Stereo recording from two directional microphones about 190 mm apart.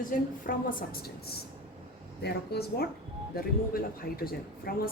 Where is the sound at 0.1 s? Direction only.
45° left (ahead or behind).